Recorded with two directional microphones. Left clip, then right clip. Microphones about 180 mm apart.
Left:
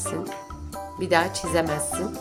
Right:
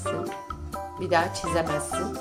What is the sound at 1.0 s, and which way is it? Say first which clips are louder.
Speech: left 2 dB; 40° left (ahead or behind).